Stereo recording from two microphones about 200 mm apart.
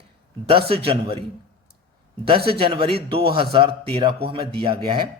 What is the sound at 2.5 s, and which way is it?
A man's voice, 25° right (ahead or behind).